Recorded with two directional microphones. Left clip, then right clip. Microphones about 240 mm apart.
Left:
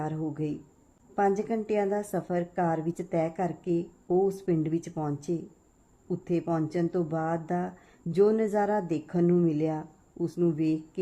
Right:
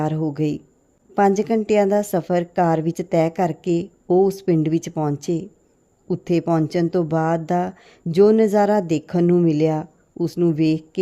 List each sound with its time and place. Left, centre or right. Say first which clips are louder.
0.0 s speech: right 10 dB; right